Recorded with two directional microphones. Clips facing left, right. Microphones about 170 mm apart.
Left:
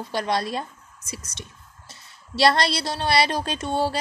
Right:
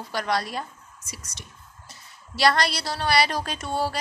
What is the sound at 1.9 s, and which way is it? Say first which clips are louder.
A woman's voice: left 6 dB; 25° left (ahead or behind).